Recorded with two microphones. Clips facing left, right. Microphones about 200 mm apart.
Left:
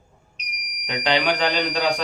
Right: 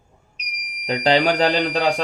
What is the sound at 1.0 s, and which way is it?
Speech, 35° right (ahead or behind).